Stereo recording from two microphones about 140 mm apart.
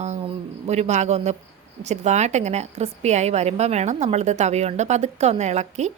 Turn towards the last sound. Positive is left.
turn(degrees=-55)  # may be behind; listen again after turning